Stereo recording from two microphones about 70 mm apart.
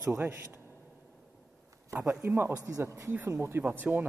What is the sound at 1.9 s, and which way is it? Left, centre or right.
Speech, right.